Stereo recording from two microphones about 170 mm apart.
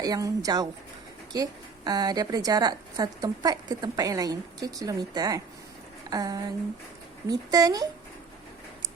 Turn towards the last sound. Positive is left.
turn(degrees=-20)  # may be behind; listen again after turning